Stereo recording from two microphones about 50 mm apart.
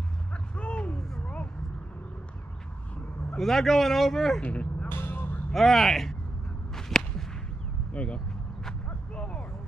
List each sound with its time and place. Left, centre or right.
0.6 s a sound: left
3.3 s speech: centre
4.4 s speech: left
4.8 s vehicle: left
5.5 s speech: centre
6.7 s whip: centre
7.9 s speech: left
9.1 s a sound: left